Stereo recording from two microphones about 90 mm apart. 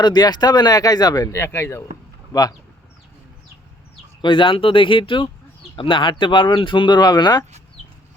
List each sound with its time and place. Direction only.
0.0 s speech: 50° left (ahead or behind)
1.4 s speech: 30° left (ahead or behind)
2.3 s speech: 45° left (ahead or behind)
4.2 s speech: 65° left (ahead or behind); by 7.4 s 50° left (ahead or behind)